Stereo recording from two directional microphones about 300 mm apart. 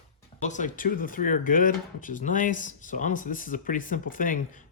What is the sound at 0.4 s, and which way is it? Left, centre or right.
Speech, left.